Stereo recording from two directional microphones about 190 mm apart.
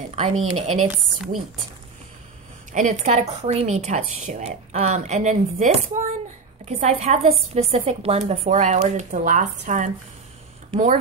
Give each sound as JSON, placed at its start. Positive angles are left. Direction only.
{"t": 0.6, "sound": "a woman's voice", "side_deg": -35}
{"t": 0.8, "sound": "a woman's voice", "side_deg": -5}
{"t": 2.7, "sound": "a woman's voice", "side_deg": -40}